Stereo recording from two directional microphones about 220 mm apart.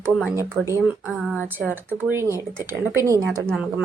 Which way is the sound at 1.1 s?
Centre (ahead or behind).